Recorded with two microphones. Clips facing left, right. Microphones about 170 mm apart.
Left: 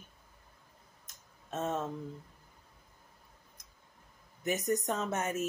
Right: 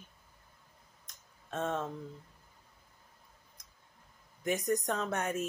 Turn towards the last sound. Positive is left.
turn(degrees=5)  # may be behind; listen again after turning